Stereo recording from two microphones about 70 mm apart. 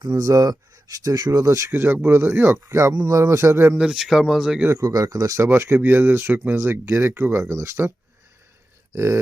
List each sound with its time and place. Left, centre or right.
0.1 s speech: right
1.7 s speech: right
3.1 s speech: right
3.8 s speech: centre
4.8 s speech: right
5.5 s speech: right
6.8 s speech: right